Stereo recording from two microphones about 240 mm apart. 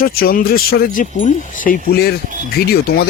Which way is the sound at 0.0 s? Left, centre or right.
Left.